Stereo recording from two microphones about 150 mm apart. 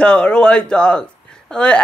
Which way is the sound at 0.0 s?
5° left (ahead or behind).